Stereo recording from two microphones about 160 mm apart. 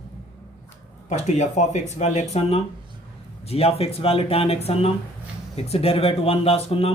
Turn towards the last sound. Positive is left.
turn(degrees=40)  # may be behind; listen again after turning